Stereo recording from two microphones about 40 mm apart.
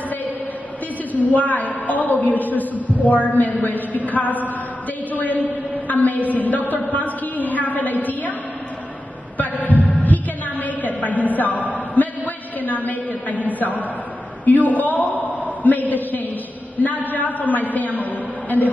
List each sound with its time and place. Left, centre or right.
1.1 s a man's voice: left
9.4 s a sound: left
12.5 s a man's voice: left